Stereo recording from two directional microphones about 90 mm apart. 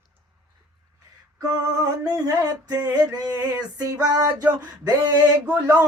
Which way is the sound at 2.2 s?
40° right (ahead or behind).